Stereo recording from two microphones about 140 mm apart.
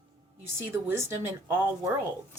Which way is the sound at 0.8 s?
20° right (ahead or behind).